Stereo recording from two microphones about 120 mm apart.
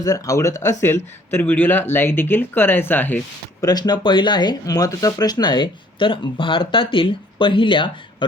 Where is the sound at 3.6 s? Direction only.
35° left (ahead or behind).